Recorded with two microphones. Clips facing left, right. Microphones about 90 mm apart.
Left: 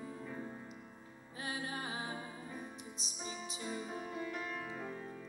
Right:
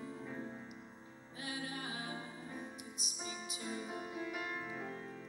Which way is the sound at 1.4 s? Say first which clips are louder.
Left 2 dB; 35° left (ahead or behind).